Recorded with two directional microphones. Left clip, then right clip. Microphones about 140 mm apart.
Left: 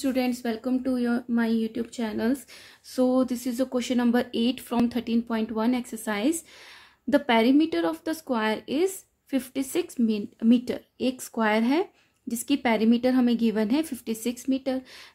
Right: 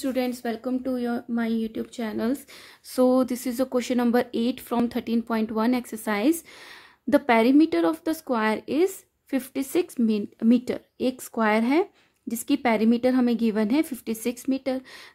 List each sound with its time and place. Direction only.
0.0 s speech: 25° right (ahead or behind)
2.5 s speech: 45° right (ahead or behind)